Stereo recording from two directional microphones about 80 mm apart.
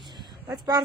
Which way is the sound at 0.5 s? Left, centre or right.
Right.